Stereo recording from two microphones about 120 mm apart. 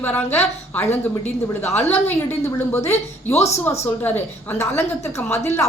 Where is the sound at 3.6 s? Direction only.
20° left (ahead or behind).